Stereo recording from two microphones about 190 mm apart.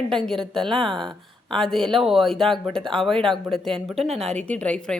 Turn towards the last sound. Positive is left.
turn(degrees=5)  # may be behind; listen again after turning